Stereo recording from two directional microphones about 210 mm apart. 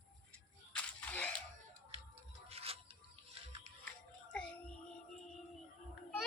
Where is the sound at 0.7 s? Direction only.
5° left (ahead or behind).